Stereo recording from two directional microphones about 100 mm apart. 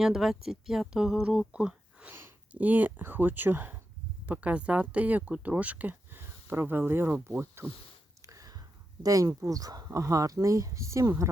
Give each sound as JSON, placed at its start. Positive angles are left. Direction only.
{"t": 0.0, "sound": "speech", "side_deg": -5}
{"t": 8.3, "sound": "a sound", "side_deg": -35}
{"t": 9.0, "sound": "speech", "side_deg": -35}